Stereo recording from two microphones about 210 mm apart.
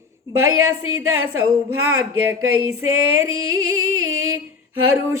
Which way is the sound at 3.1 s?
80° right.